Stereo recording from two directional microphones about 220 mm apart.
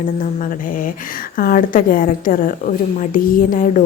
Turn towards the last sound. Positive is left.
turn(degrees=35)  # may be behind; listen again after turning